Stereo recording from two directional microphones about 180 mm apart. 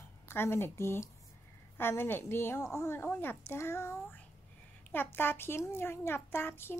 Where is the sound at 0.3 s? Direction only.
15° left (ahead or behind).